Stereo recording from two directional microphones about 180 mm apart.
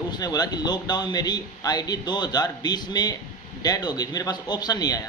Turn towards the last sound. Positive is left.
turn(degrees=20)  # may be behind; listen again after turning